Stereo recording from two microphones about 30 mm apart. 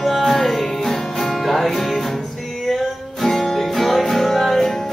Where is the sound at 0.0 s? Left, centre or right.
Centre.